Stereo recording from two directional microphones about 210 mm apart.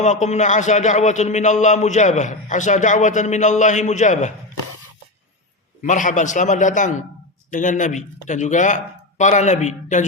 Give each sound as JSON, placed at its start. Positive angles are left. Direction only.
{"t": 0.0, "sound": "a man's voice", "side_deg": 35}
{"t": 5.8, "sound": "a man's voice", "side_deg": 35}